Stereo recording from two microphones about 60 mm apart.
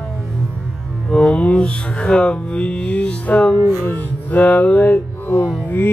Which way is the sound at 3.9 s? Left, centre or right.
Left.